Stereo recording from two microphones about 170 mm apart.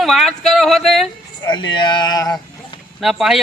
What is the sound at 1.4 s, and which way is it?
Speech, 25° left (ahead or behind).